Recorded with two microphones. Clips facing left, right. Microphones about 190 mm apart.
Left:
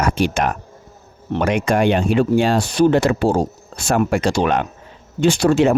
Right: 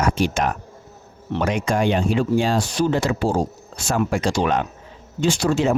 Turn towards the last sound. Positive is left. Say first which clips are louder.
# left 5 dB
turn(degrees=65)  # may be behind; listen again after turning